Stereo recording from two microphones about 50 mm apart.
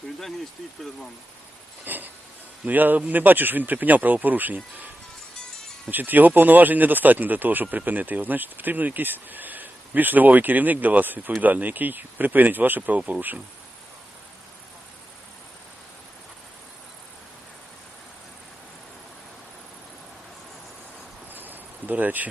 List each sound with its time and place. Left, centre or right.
1.8 s a sound: right
2.6 s speech: right
5.9 s speech: right
21.3 s cricket: right